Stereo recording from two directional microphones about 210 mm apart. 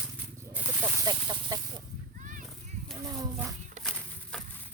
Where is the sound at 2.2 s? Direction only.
40° right (ahead or behind).